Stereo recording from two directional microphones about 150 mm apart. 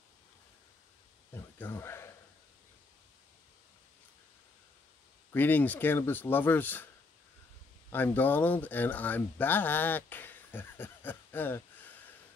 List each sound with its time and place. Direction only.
1.3 s a sound: 15° left (ahead or behind)
5.3 s speech: 10° left (ahead or behind)
7.9 s speech: 15° left (ahead or behind)